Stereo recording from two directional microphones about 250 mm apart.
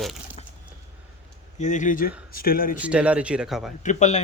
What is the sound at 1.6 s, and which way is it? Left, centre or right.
Speech, left.